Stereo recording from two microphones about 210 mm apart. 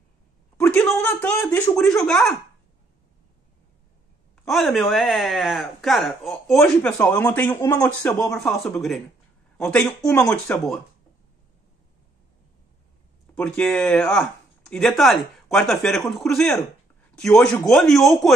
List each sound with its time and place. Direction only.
0.6 s speech: 5° left (ahead or behind)
4.5 s speech: centre (ahead or behind)
8.4 s speech: centre (ahead or behind)
13.3 s speech: 5° left (ahead or behind)